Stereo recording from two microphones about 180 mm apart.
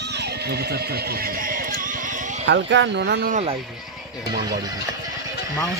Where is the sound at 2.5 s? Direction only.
80° right.